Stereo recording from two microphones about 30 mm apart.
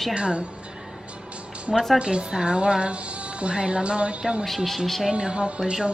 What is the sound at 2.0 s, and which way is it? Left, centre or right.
Speech, right.